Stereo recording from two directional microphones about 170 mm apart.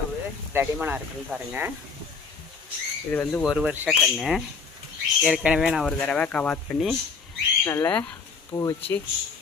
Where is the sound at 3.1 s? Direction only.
10° left (ahead or behind).